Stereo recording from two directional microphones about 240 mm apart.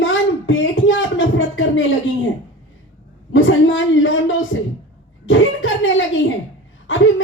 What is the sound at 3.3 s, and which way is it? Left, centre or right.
Speech, left.